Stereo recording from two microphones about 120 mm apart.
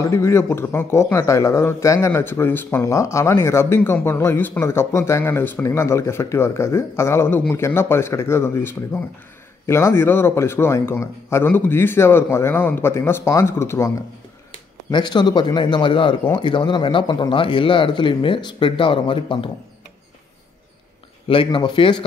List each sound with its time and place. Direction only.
0.1 s speech: 20° left (ahead or behind)
14.9 s speech: 40° left (ahead or behind)
21.3 s speech: 45° left (ahead or behind)